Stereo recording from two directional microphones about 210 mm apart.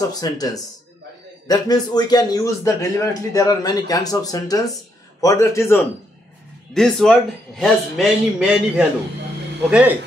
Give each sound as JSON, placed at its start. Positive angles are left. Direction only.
{"t": 0.1, "sound": "a man's voice", "side_deg": 15}
{"t": 6.7, "sound": "speech", "side_deg": 0}